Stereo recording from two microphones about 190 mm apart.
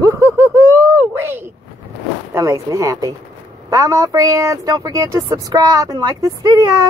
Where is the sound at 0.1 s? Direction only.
15° right (ahead or behind).